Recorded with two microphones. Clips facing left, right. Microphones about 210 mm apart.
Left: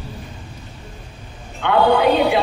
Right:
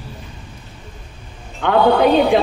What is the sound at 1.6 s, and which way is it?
Speech, 45° right (ahead or behind).